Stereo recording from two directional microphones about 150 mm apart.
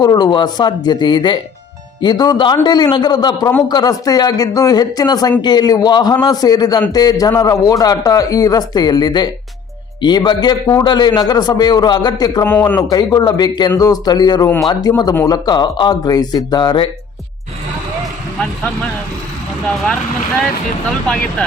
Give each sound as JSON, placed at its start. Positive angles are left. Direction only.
{"t": 0.0, "sound": "a man's voice", "side_deg": 25}
{"t": 12.5, "sound": "a man's voice", "side_deg": 15}
{"t": 12.9, "sound": "a man's voice", "side_deg": 25}